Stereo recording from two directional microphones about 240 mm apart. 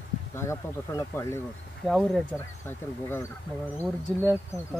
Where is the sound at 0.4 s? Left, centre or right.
Centre.